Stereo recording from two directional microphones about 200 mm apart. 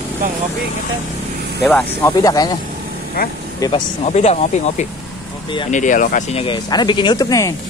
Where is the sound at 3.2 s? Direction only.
50° left (ahead or behind).